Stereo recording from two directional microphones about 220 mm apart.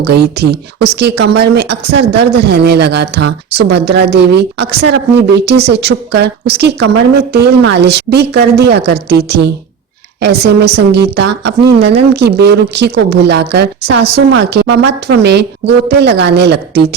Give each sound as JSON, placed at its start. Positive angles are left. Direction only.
{"t": 0.0, "sound": "a woman's voice", "side_deg": -50}